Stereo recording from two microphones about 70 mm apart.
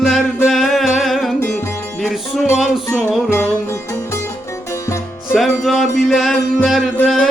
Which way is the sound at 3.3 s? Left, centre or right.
Left.